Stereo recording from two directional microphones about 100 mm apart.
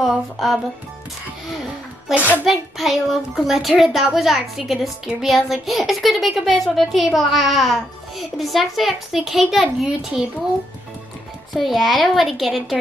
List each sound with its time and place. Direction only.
0.0 s music: centre (ahead or behind)
2.1 s a child's voice: 15° right (ahead or behind)
2.4 s a child's voice: centre (ahead or behind)
11.5 s a child's voice: centre (ahead or behind)